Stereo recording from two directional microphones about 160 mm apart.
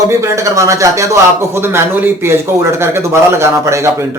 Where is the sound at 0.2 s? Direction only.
20° right (ahead or behind).